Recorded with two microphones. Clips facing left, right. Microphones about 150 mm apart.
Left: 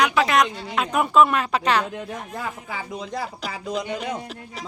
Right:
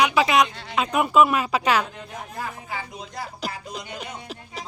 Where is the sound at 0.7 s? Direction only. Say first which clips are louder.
Even; centre (ahead or behind).